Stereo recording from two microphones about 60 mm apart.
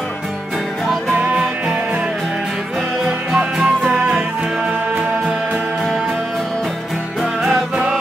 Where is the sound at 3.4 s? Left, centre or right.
Centre.